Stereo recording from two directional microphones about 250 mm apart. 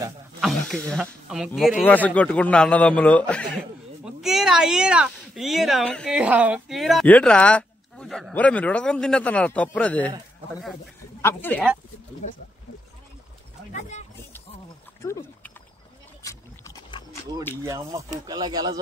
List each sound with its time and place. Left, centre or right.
0.4 s speech: centre
11.1 s speech: centre
12.2 s speech: left
13.7 s a sound: left
15.0 s a sound: centre
17.6 s speech: centre